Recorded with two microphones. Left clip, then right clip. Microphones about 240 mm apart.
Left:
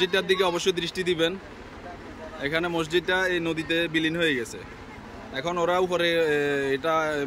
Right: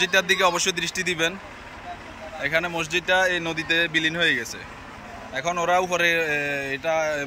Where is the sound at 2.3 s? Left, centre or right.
Centre.